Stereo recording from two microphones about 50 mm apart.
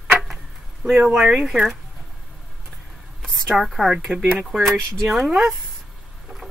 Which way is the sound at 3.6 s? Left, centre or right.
Centre.